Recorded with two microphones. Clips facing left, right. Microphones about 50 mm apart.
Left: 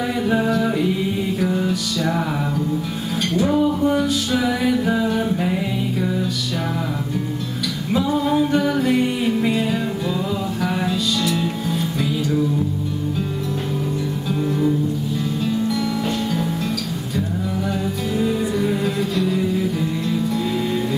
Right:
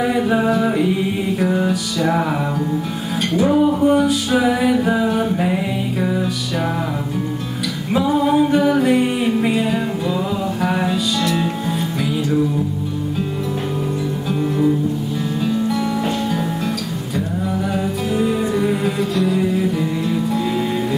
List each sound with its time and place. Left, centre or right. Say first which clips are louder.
0.1 s music: right 3 dB; centre
3.3 s music: right 3 dB; centre
7.9 s music: right 3 dB; centre
18.1 s music: right 2 dB; centre